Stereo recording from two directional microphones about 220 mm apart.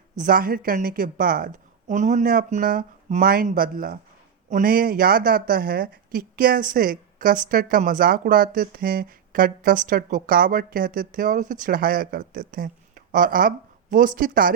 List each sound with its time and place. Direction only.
0.2 s a woman's voice: 40° right (ahead or behind)